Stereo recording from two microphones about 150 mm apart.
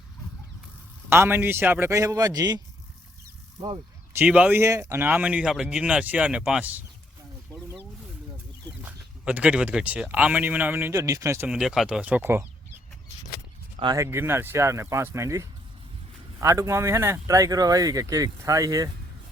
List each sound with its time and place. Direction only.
1.1 s speech: 15° right (ahead or behind)
4.2 s speech: 10° right (ahead or behind)
8.8 s speech: 10° right (ahead or behind)
11.4 s speech: 5° right (ahead or behind)
13.9 s speech: 20° right (ahead or behind)